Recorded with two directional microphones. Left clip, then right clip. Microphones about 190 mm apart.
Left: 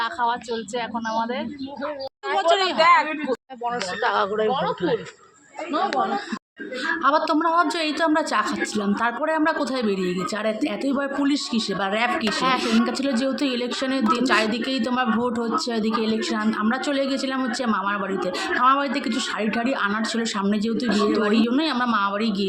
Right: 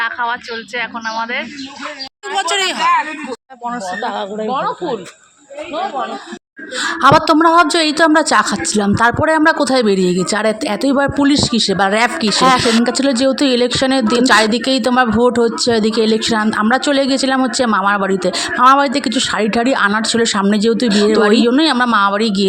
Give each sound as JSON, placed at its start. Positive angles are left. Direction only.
{"t": 0.0, "sound": "speech", "side_deg": 5}
{"t": 3.7, "sound": "speech", "side_deg": 20}
{"t": 6.7, "sound": "a woman's voice", "side_deg": -60}